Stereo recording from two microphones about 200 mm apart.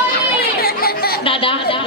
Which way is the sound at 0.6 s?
50° left (ahead or behind).